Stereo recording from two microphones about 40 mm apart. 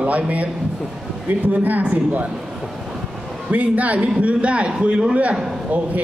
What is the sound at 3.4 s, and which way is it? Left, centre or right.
A man's voice, right.